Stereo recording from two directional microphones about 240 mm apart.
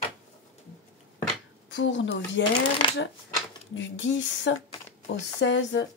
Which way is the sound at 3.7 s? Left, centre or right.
Left.